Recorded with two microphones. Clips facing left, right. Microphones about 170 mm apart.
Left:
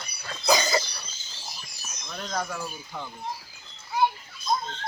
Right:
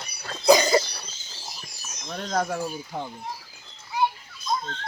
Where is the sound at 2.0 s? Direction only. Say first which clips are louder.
Right 5 dB; 45° right (ahead or behind).